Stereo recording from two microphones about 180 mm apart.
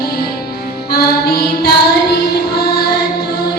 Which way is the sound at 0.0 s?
60° left (ahead or behind).